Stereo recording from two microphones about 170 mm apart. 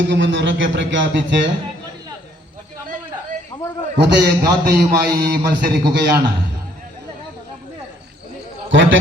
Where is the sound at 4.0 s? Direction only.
80° right.